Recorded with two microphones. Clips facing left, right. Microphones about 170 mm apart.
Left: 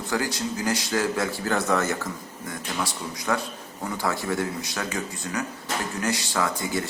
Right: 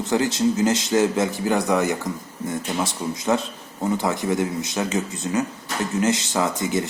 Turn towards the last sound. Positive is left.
turn(degrees=-20)  # may be behind; listen again after turning